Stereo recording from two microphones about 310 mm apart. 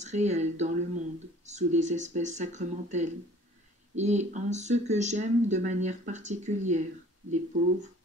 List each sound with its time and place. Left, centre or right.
0.0 s speech: right